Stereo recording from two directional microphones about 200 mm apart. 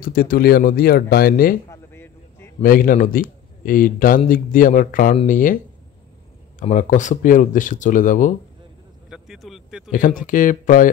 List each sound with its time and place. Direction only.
0.0 s a man's voice: 50° left (ahead or behind)
1.7 s a sound: 10° left (ahead or behind)
2.6 s a man's voice: 45° left (ahead or behind)
6.6 s speech: 40° left (ahead or behind)
9.1 s vehicle: centre (ahead or behind)
9.8 s a man's voice: 40° left (ahead or behind)